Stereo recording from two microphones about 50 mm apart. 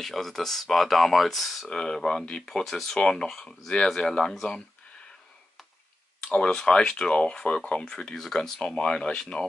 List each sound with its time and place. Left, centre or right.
0.0 s speech: centre
1.7 s speech: centre
6.3 s speech: centre
8.2 s speech: centre
8.7 s speech: centre